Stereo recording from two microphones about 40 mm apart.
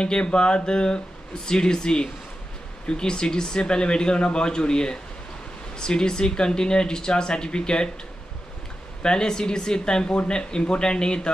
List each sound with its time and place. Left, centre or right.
0.0 s speech: left
9.0 s speech: centre